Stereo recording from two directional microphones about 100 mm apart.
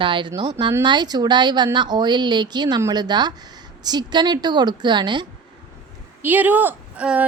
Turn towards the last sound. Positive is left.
turn(degrees=-10)  # may be behind; listen again after turning